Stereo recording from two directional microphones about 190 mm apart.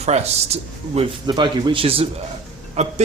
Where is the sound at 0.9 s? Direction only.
25° right (ahead or behind).